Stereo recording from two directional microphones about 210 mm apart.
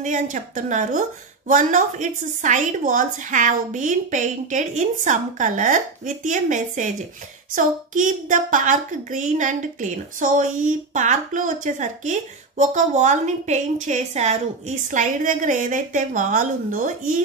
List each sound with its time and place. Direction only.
0.0 s a woman's voice: 35° right (ahead or behind)